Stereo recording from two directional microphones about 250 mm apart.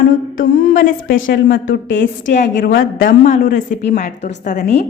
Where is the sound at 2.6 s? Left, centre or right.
Left.